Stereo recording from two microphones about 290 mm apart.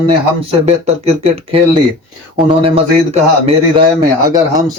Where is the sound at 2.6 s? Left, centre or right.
Centre.